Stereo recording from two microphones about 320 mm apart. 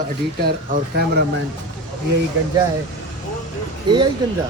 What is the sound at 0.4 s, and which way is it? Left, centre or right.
Speech, right.